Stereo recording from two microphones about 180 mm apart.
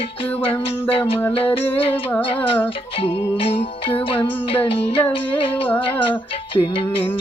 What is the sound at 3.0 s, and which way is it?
Music, 30° left (ahead or behind).